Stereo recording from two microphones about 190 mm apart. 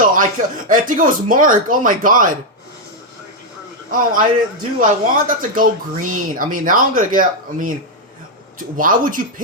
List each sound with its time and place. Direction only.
0.0 s a sound: 45° right (ahead or behind)
0.7 s speech: 45° right (ahead or behind)
3.9 s speech: 45° right (ahead or behind)